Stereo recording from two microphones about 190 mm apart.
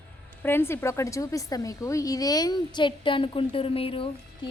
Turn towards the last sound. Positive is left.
turn(degrees=30)  # may be behind; listen again after turning